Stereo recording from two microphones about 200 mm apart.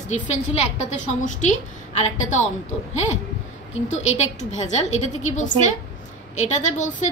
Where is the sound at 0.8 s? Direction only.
35° left (ahead or behind).